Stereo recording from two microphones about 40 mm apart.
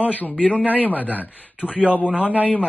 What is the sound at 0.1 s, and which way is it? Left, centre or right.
Speech, left.